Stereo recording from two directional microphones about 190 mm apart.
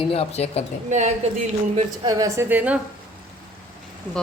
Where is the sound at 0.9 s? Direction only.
40° right (ahead or behind).